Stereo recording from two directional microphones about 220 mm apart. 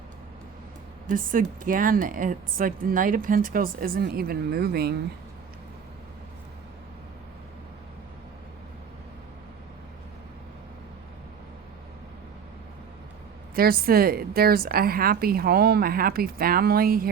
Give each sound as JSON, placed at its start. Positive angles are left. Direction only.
{"t": 1.0, "sound": "speech", "side_deg": -40}
{"t": 13.6, "sound": "a woman's voice", "side_deg": -40}